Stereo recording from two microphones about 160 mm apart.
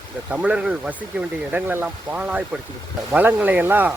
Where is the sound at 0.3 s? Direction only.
5° right (ahead or behind).